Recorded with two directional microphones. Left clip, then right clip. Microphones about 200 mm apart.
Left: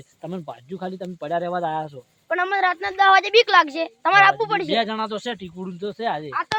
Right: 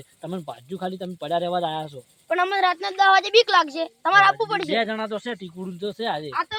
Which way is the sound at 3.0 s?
5° left (ahead or behind).